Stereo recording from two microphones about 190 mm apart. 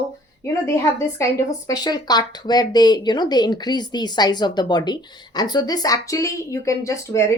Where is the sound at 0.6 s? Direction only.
15° left (ahead or behind).